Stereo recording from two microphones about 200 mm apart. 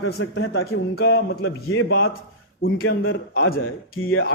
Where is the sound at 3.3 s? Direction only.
50° left (ahead or behind).